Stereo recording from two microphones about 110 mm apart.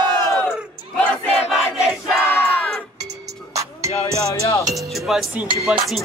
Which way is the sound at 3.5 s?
25° right (ahead or behind).